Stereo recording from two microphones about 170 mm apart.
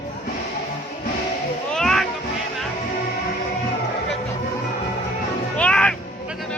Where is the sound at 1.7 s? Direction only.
Centre (ahead or behind).